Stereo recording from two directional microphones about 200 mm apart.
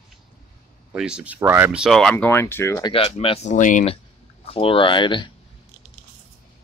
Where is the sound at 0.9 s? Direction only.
5° right (ahead or behind); by 5.3 s 25° left (ahead or behind).